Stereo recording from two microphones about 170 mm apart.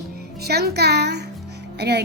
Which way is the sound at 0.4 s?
70° right (ahead or behind).